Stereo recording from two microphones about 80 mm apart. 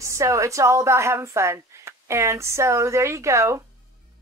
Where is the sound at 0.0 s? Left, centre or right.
Right.